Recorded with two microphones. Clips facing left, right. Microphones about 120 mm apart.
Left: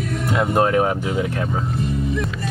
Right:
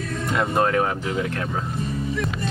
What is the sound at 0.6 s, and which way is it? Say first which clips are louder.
Speech: left 3 dB; 15° left (ahead or behind).